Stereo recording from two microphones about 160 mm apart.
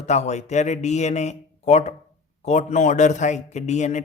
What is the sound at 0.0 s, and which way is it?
Speech, 45° left (ahead or behind).